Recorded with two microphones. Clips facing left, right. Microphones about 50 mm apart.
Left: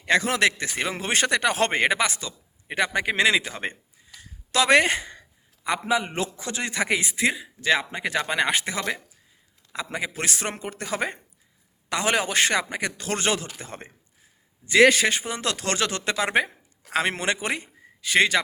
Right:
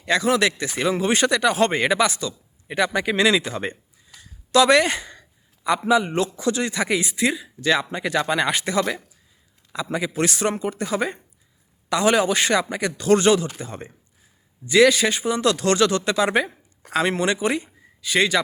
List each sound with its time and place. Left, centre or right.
0.0 s speech: left
4.2 s a sound: left
5.6 s a man's voice: left